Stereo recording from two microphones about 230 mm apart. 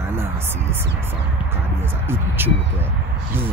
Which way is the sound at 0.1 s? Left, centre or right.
Centre.